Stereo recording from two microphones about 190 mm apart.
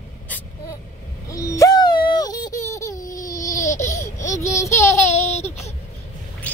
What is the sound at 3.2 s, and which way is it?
Baby cry, 40° left (ahead or behind).